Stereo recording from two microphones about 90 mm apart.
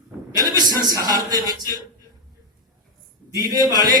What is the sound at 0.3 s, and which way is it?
A man's voice, 45° right (ahead or behind).